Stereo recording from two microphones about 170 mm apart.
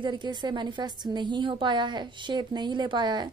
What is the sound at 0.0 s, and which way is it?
A woman's voice, 25° right (ahead or behind).